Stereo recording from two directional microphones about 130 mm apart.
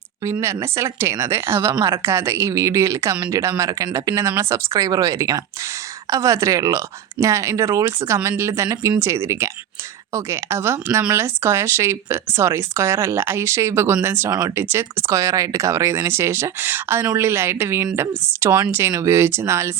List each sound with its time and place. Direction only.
0.3 s speech: 20° right (ahead or behind)